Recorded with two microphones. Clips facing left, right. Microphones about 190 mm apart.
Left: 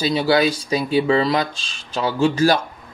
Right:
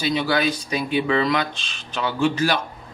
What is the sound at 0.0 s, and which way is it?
Speech, 35° left (ahead or behind).